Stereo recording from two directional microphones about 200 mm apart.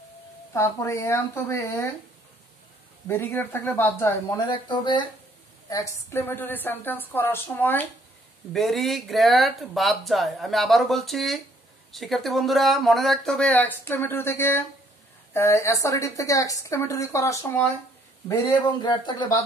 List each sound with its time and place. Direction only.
0.5 s a woman's voice: 15° left (ahead or behind)
3.1 s a woman's voice: 10° left (ahead or behind)
4.5 s a woman's voice: 20° left (ahead or behind)